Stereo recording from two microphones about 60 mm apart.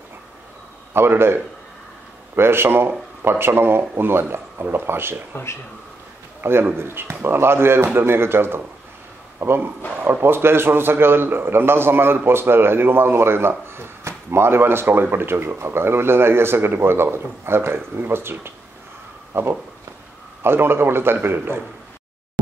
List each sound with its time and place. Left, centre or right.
0.9 s a man's voice: right
5.3 s speech: left
6.4 s a man's voice: right